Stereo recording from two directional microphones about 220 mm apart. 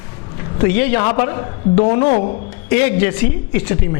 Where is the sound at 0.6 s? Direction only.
15° left (ahead or behind); by 2.4 s 30° left (ahead or behind).